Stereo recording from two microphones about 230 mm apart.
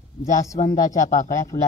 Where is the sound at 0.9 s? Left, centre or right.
Left.